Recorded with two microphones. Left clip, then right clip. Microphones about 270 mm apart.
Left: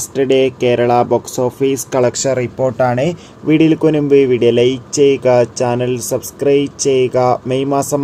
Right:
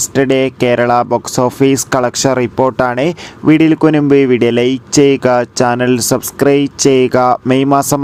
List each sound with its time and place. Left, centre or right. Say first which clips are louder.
0.0 s speech: right 1 dB; right